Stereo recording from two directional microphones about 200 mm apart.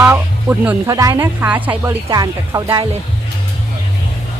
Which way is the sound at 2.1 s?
20° right (ahead or behind).